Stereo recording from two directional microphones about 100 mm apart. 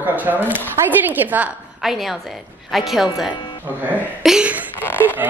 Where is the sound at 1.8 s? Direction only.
Centre (ahead or behind).